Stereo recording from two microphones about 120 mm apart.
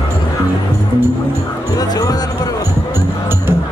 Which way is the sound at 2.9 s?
20° right (ahead or behind).